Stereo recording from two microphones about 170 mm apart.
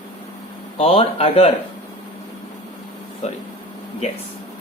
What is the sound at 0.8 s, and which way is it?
Speech, 35° left (ahead or behind).